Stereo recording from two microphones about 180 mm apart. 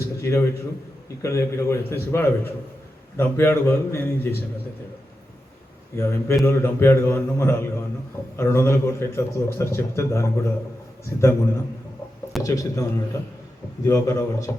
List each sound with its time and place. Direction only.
0.0 s a sound: 15° left (ahead or behind)
1.2 s a man's voice: 15° left (ahead or behind)
6.0 s a man's voice: 15° left (ahead or behind)